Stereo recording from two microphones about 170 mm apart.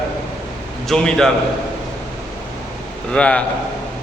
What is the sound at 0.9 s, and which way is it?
Speech, centre (ahead or behind).